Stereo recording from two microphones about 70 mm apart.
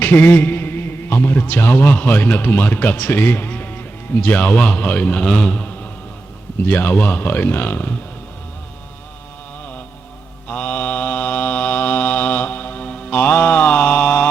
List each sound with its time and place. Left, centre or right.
0.0 s a man's voice: left
10.5 s mantra: left